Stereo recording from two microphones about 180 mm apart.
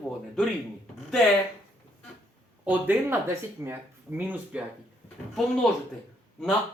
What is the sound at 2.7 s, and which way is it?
Speech, 10° right (ahead or behind).